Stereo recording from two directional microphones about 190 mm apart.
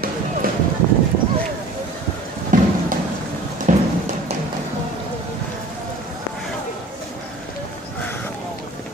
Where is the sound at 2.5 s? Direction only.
45° right (ahead or behind).